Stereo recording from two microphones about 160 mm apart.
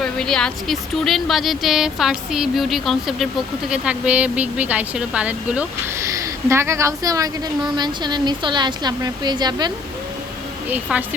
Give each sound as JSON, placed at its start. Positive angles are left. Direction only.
{"t": 0.0, "sound": "speech", "side_deg": 5}
{"t": 10.7, "sound": "a woman's voice", "side_deg": -10}